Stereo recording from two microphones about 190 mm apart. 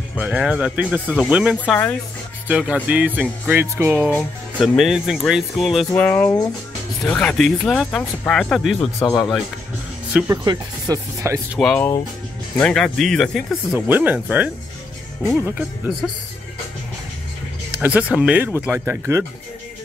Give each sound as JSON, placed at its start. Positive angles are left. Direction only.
{"t": 0.2, "sound": "speech", "side_deg": -5}
{"t": 4.1, "sound": "speech", "side_deg": 0}
{"t": 5.9, "sound": "speech", "side_deg": 15}
{"t": 10.1, "sound": "speech", "side_deg": -10}
{"t": 10.4, "sound": "speech", "side_deg": -20}
{"t": 11.5, "sound": "speech", "side_deg": 5}
{"t": 13.8, "sound": "speech", "side_deg": -10}
{"t": 17.7, "sound": "speech", "side_deg": -5}